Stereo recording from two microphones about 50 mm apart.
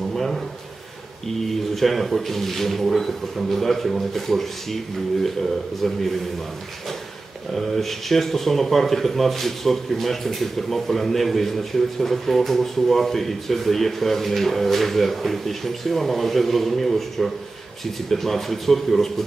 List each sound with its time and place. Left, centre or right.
0.1 s a sound: centre
1.8 s speech: centre
5.8 s speech: centre
7.5 s speech: centre